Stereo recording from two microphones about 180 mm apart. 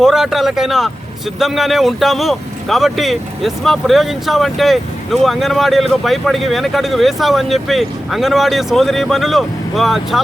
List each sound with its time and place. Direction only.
0.0 s speech: centre (ahead or behind)